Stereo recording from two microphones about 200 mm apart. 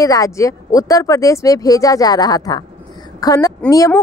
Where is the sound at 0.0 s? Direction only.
15° left (ahead or behind).